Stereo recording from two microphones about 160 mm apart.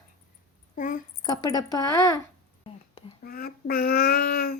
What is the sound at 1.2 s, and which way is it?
Speech, 25° left (ahead or behind).